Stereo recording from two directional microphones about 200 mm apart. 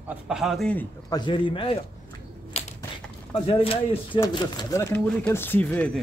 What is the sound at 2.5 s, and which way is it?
Typewriter, 30° left (ahead or behind).